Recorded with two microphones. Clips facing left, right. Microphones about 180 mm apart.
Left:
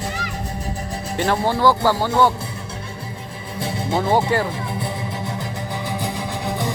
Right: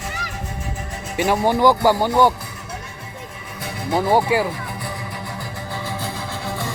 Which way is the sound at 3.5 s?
30° left (ahead or behind).